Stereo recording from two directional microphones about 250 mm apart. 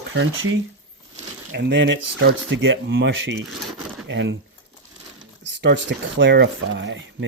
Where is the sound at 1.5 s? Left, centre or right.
Right.